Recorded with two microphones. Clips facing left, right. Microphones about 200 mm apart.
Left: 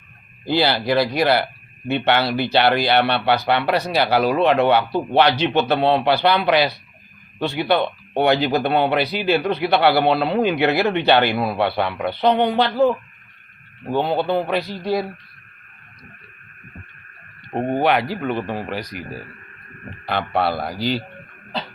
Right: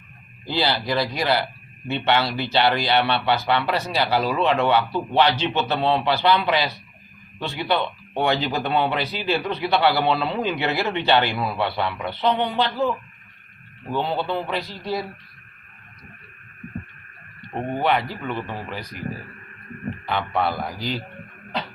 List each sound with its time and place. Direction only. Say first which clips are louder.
0.4 s speech: left 5 dB; 60° left (ahead or behind)
17.5 s speech: left 6 dB; 35° left (ahead or behind)
17.8 s speech: left 1 dB; 90° left
18.3 s speech: left 4 dB; 35° left (ahead or behind)
18.7 s speech: left 5 dB; 80° left
20.1 s a man's voice: left 3 dB; 75° left (ahead or behind)
20.4 s speech: left 3 dB; 35° left (ahead or behind)